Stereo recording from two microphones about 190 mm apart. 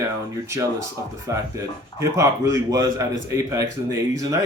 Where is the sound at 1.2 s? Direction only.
15° right (ahead or behind).